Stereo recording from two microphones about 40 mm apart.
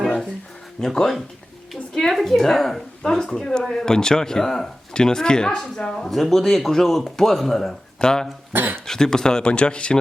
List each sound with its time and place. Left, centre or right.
0.8 s speech: centre
1.9 s a sound: centre
2.1 s speech: centre
5.9 s speech: centre
7.9 s speech: centre
8.5 s speech: right
8.9 s speech: centre